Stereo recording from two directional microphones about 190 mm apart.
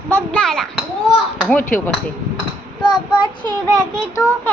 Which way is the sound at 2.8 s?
25° left (ahead or behind).